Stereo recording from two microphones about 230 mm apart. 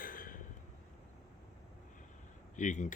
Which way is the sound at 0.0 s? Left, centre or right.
Left.